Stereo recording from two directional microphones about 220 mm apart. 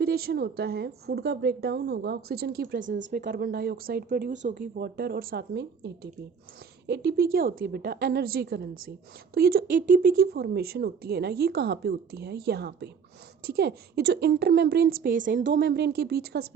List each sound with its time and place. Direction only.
0.0 s speech: 45° right (ahead or behind)
15.4 s speech: 55° right (ahead or behind)